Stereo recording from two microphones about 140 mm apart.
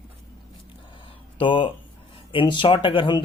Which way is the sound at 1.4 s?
35° left (ahead or behind).